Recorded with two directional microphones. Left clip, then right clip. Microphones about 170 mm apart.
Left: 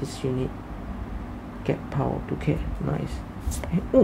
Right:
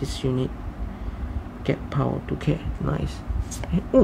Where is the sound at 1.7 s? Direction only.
30° right (ahead or behind).